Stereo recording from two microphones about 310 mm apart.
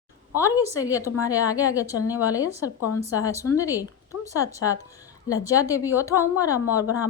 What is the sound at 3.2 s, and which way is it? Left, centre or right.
Speech, centre.